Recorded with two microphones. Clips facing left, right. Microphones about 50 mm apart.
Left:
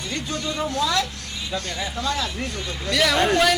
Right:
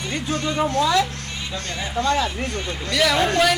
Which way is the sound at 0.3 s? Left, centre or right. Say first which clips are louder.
Right 4 dB; right.